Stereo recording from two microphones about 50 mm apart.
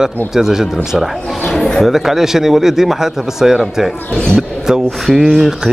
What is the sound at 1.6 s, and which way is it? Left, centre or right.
Speech, centre.